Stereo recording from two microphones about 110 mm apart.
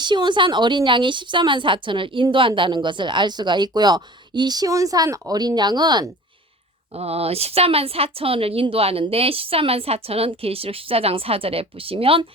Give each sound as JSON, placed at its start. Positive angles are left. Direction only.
{"t": 0.0, "sound": "a woman's voice", "side_deg": -45}
{"t": 6.9, "sound": "a woman's voice", "side_deg": -65}